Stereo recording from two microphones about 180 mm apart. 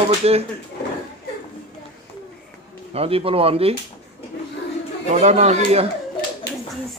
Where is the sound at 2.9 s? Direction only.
30° right (ahead or behind).